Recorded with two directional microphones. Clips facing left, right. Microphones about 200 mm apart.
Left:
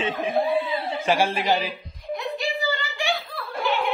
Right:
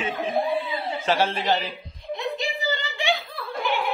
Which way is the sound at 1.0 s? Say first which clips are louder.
Left 1 dB; 10° left (ahead or behind).